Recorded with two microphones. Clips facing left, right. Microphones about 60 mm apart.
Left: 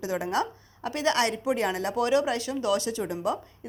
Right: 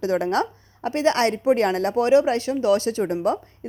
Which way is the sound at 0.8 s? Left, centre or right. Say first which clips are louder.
Right 5 dB; right.